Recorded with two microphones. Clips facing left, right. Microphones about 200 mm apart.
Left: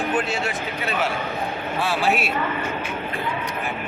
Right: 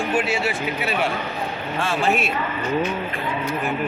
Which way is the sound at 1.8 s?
Centre (ahead or behind).